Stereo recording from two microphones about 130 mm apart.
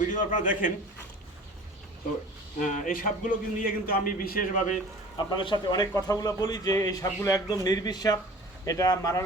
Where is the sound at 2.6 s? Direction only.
75° left (ahead or behind).